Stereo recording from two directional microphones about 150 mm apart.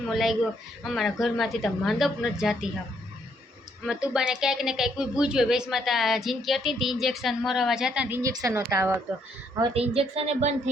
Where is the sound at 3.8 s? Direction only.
5° right (ahead or behind).